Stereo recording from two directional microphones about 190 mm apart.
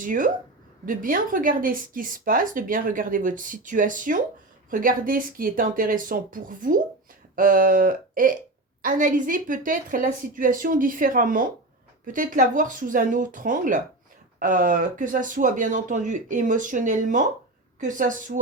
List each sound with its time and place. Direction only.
0.0 s speech: 45° right (ahead or behind)